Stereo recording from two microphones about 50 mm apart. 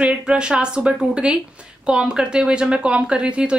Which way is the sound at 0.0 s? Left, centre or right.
Centre.